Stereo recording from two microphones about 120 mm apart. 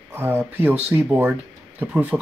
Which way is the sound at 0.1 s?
15° right (ahead or behind).